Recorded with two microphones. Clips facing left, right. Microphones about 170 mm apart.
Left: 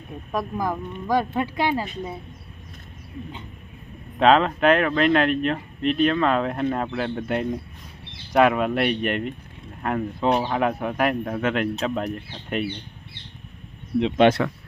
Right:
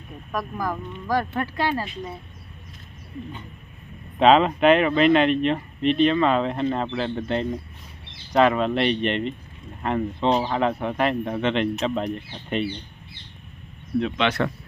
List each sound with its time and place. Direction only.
0.3 s speech: 20° left (ahead or behind)
4.2 s speech: centre (ahead or behind)
13.9 s speech: 10° left (ahead or behind)